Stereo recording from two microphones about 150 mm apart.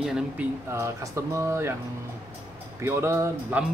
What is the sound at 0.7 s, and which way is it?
Speech, 20° right (ahead or behind).